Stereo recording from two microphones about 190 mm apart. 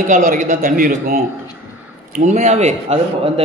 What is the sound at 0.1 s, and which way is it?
A man's voice, 45° right (ahead or behind).